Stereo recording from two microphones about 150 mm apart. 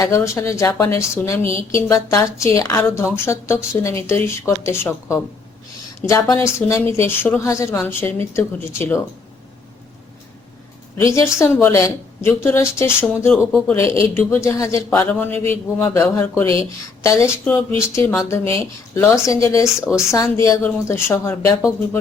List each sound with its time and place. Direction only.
0.0 s a woman's voice: 20° left (ahead or behind)
10.9 s a woman's voice: 20° left (ahead or behind)
19.6 s speech: 5° right (ahead or behind)
20.3 s a woman's voice: 15° left (ahead or behind)